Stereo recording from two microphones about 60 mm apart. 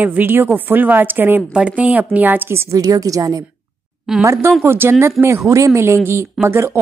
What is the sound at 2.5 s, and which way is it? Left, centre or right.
Speech, right.